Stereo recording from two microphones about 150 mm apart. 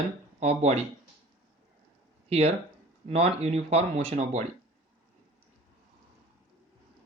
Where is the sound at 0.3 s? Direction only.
45° right (ahead or behind).